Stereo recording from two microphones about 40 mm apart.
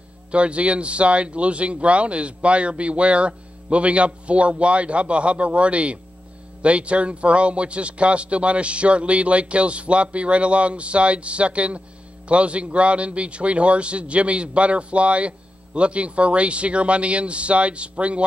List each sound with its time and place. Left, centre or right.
0.3 s a man's voice: right